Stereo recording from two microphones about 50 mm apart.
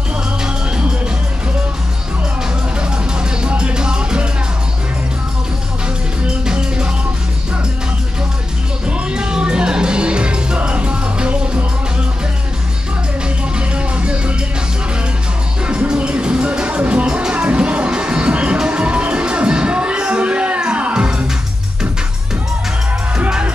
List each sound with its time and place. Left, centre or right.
3.4 s music: centre
6.2 s music: centre
8.8 s music: centre
13.6 s music: right
15.6 s music: right
23.1 s music: centre